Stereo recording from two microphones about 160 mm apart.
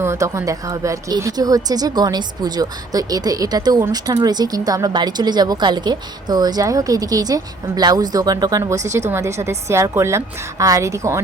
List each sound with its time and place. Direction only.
0.0 s a woman's voice: 15° right (ahead or behind)